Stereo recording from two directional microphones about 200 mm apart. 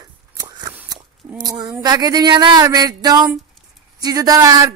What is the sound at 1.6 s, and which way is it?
Speech, 20° right (ahead or behind).